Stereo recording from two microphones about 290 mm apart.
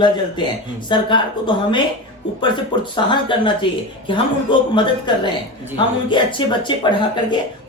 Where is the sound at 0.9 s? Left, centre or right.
Centre.